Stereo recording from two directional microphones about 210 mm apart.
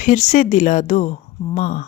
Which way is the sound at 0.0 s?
35° left (ahead or behind).